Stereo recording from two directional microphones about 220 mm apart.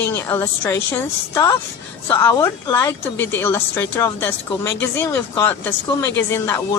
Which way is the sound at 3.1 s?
55° left (ahead or behind).